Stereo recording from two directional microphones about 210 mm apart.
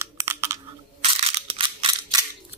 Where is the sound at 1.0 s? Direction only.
30° right (ahead or behind).